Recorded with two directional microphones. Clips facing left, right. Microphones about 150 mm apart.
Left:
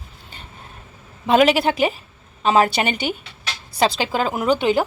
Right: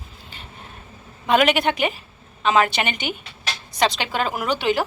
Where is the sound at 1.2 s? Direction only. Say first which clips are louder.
Left 3 dB; 30° left (ahead or behind).